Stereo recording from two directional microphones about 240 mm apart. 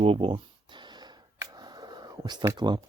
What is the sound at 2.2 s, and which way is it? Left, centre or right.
Speech, centre.